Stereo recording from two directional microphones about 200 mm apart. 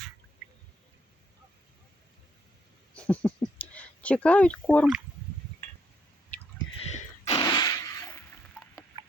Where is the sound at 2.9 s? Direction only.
5° left (ahead or behind).